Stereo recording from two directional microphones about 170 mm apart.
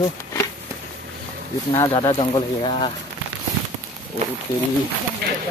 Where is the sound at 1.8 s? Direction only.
20° left (ahead or behind).